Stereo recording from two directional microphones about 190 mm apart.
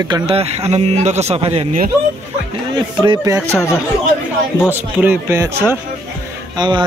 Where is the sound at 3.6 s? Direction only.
15° left (ahead or behind).